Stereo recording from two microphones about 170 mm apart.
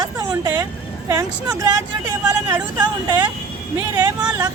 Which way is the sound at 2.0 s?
20° right (ahead or behind).